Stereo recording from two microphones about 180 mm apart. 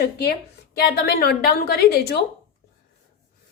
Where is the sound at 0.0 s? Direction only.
60° left (ahead or behind).